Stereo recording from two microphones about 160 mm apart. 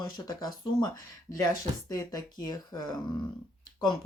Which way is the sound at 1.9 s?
25° left (ahead or behind).